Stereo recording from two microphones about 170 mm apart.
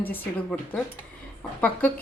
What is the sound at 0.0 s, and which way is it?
Speech, 10° left (ahead or behind).